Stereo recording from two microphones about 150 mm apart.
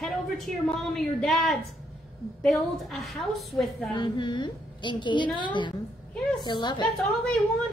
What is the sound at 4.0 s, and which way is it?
A woman's voice, 30° left (ahead or behind).